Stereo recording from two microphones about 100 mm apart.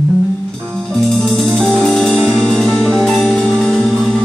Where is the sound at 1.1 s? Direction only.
5° left (ahead or behind).